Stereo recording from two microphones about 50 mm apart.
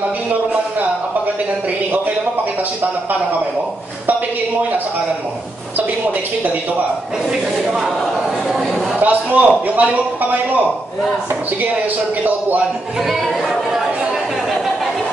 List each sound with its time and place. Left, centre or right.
9.0 s a man's voice: right
13.1 s speech: centre